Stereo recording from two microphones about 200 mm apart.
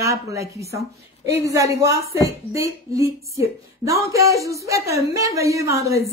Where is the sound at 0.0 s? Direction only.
15° right (ahead or behind).